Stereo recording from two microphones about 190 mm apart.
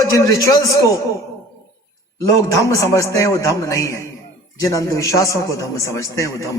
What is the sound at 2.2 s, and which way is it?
A man's voice, 15° left (ahead or behind).